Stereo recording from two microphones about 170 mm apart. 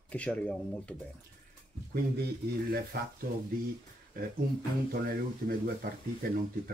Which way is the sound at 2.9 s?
60° right (ahead or behind).